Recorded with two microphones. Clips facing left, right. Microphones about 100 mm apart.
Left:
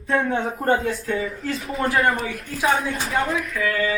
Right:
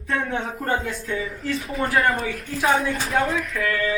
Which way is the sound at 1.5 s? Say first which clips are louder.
Even; centre (ahead or behind).